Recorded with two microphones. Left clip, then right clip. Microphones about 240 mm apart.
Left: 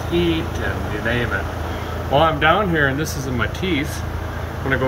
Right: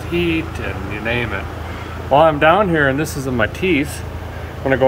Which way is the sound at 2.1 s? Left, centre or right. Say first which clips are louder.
Right 4 dB; centre.